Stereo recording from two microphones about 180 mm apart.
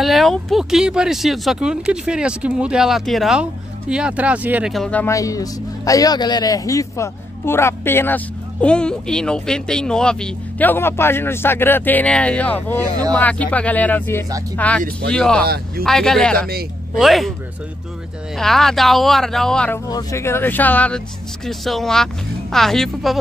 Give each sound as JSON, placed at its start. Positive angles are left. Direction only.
{"t": 0.0, "sound": "speech", "side_deg": 0}
{"t": 5.0, "sound": "a man's voice", "side_deg": 20}
{"t": 15.4, "sound": "speech", "side_deg": -60}
{"t": 15.8, "sound": "speech", "side_deg": 5}
{"t": 18.3, "sound": "speech", "side_deg": 0}
{"t": 19.9, "sound": "a man's voice", "side_deg": 20}